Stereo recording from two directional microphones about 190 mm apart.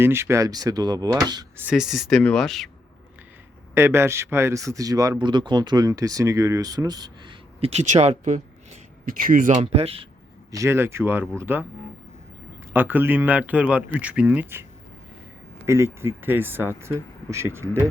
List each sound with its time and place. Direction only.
0.0 s speech: 15° right (ahead or behind)
1.6 s speech: 5° right (ahead or behind)
3.8 s speech: 15° right (ahead or behind); by 10.1 s 30° right (ahead or behind)
10.5 s speech: 15° right (ahead or behind)
12.7 s speech: 10° right (ahead or behind)